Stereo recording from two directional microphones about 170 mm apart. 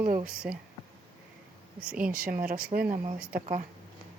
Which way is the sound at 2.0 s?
55° right (ahead or behind).